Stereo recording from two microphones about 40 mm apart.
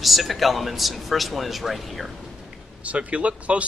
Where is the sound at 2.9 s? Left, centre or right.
Right.